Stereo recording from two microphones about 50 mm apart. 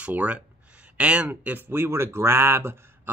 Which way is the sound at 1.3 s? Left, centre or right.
Right.